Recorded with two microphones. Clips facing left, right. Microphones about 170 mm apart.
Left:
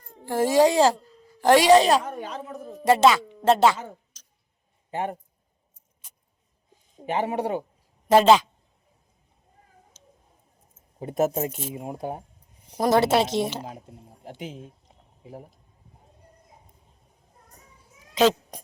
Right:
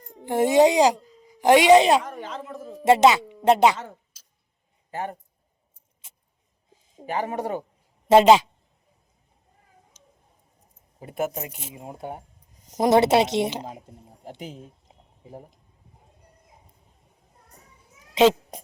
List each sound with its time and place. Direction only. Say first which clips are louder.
0.0 s a child's voice: right 2 dB; 20° right (ahead or behind)
2.0 s speech: left 1 dB; 10° left (ahead or behind)
2.6 s speech: even; centre (ahead or behind)
2.8 s speech: right 1 dB; 20° right (ahead or behind)
4.9 s speech: left 2 dB; 20° left (ahead or behind)
7.0 s speech: left 2 dB; 20° left (ahead or behind)
8.0 s speech: right 2 dB; 20° right (ahead or behind)
10.0 s tick-tock: left 1 dB; 15° right (ahead or behind)
11.0 s speech: left 5 dB; 30° left (ahead or behind)
11.7 s speech: left 4 dB; 20° left (ahead or behind)
12.7 s speech: right 2 dB; 20° right (ahead or behind)
14.3 s speech: left 1 dB; centre (ahead or behind)
18.1 s speech: right 2 dB; 25° right (ahead or behind)